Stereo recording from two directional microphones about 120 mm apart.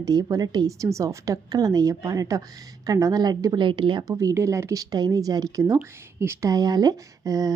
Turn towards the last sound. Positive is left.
turn(degrees=-30)  # may be behind; listen again after turning